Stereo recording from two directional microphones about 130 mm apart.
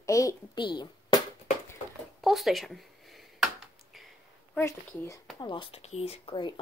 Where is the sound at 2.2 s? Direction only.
Centre (ahead or behind).